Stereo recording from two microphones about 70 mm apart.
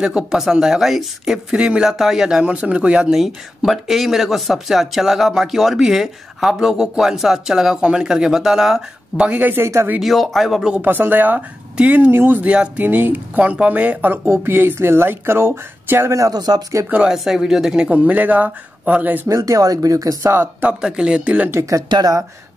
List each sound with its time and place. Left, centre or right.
0.0 s speech: centre
3.2 s speech: centre
9.1 s speech: centre
9.5 s speech: right
9.9 s speech: centre
10.7 s speech: right
12.1 s speech: right
12.4 s speech: centre
16.1 s speech: right
16.3 s speech: right
17.1 s speech: centre; by 19.2 s right
19.2 s speech: right
20.6 s speech: centre
21.8 s speech: right